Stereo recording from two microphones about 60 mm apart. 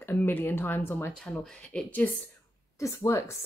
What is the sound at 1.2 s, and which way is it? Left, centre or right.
Speech, centre.